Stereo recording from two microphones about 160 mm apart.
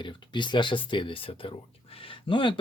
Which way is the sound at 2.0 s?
30° left (ahead or behind).